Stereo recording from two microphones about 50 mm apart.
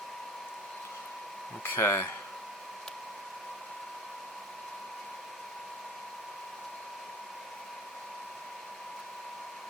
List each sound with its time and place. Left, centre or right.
1.6 s speech: left